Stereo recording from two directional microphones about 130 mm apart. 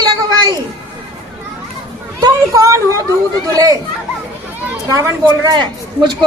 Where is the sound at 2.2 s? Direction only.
25° right (ahead or behind).